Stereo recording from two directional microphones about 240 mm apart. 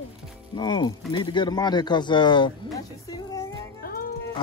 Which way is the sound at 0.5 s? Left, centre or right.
Centre.